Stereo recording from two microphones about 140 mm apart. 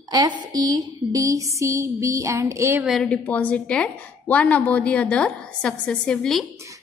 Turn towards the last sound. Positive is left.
turn(degrees=5)  # may be behind; listen again after turning